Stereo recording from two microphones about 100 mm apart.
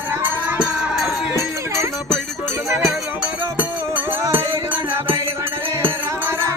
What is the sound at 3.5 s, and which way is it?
Music, 20° right (ahead or behind).